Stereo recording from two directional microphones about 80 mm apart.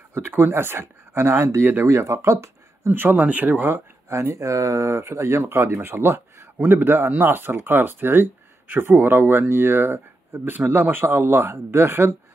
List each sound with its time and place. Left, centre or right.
0.3 s speech: right
4.1 s speech: right